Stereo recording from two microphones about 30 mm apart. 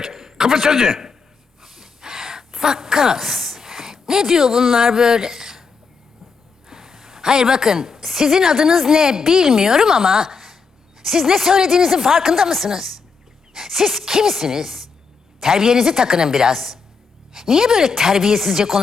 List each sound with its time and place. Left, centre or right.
0.0 s a man's voice: centre
1.6 s gasp: centre
6.7 s a woman's voice: centre